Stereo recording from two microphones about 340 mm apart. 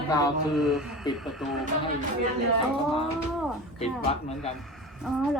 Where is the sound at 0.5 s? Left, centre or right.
Centre.